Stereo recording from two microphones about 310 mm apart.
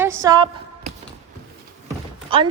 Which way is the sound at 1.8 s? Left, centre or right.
Centre.